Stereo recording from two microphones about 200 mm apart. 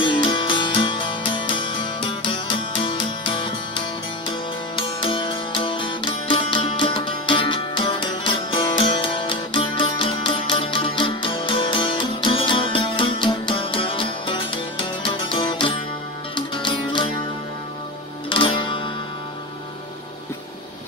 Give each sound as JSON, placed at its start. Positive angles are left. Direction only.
{"t": 0.0, "sound": "music", "side_deg": 25}
{"t": 18.3, "sound": "music", "side_deg": 25}